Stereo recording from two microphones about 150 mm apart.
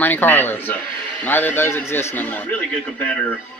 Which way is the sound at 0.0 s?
15° left (ahead or behind).